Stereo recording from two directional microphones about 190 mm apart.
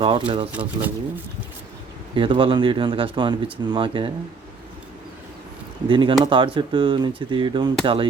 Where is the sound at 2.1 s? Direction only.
25° right (ahead or behind).